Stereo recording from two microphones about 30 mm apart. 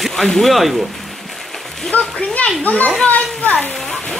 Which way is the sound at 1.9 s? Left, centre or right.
Left.